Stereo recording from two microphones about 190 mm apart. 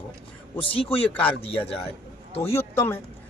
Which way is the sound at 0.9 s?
5° left (ahead or behind).